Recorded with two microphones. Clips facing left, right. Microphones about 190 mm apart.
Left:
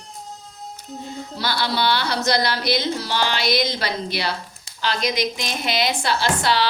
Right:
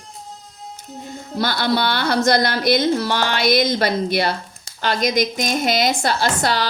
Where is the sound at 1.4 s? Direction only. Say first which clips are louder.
Right 4 dB; 50° right (ahead or behind).